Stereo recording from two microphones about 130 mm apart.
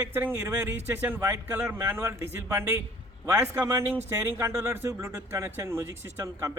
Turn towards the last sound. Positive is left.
turn(degrees=-20)  # may be behind; listen again after turning